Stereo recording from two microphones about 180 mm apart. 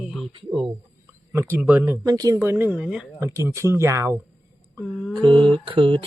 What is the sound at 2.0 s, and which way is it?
Speech, 20° right (ahead or behind).